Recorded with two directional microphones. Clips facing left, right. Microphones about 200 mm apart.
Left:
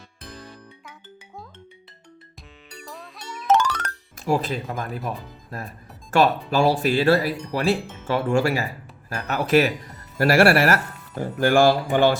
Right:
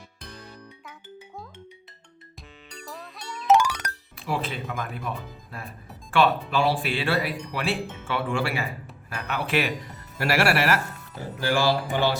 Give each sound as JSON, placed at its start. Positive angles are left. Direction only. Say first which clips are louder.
{"t": 2.6, "sound": "music", "louder": "even", "side_deg": 5}
{"t": 3.4, "sound": "music", "louder": "even", "side_deg": -10}
{"t": 4.2, "sound": "speech", "louder": "left 6 dB", "side_deg": 40}